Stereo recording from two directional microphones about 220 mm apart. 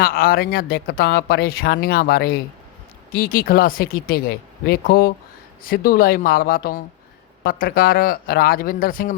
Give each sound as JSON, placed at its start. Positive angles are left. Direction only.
{"t": 0.0, "sound": "speech", "side_deg": 40}